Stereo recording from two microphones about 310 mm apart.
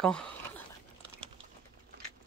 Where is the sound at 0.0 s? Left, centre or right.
Centre.